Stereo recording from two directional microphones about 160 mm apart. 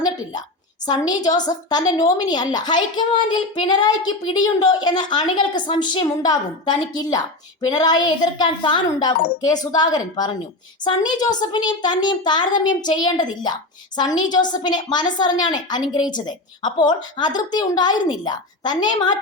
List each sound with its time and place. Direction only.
0.9 s a woman's voice: 25° left (ahead or behind)